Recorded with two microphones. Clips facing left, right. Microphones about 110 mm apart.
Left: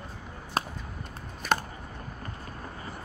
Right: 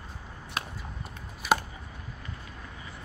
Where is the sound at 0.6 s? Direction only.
35° left (ahead or behind).